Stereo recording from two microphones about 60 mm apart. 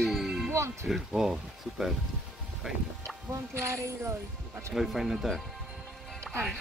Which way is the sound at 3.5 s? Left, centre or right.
Right.